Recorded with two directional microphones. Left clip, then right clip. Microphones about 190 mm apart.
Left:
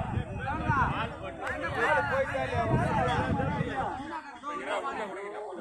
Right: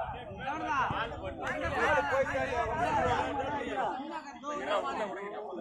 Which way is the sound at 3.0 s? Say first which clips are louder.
Even; 10° left (ahead or behind).